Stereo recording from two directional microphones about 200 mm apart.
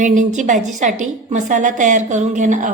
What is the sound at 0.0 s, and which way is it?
A woman's voice, 40° right (ahead or behind).